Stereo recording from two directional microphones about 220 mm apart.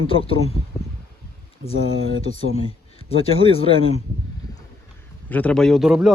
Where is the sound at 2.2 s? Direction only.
25° left (ahead or behind).